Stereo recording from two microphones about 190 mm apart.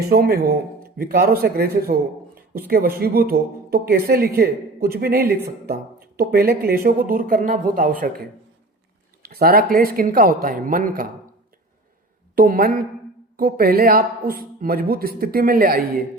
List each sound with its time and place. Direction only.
0.0 s a woman's voice: 55° right (ahead or behind)
12.4 s a woman's voice: 50° right (ahead or behind)